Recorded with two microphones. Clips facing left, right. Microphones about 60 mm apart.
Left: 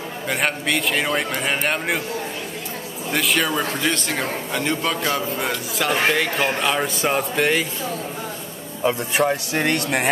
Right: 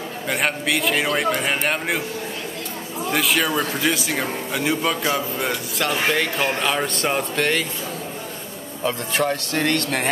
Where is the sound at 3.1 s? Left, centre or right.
Centre.